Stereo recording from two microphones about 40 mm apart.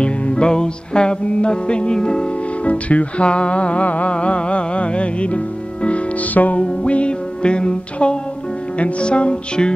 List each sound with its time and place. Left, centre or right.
0.0 s music: left
2.6 s music: left
6.3 s music: left
6.6 s music: left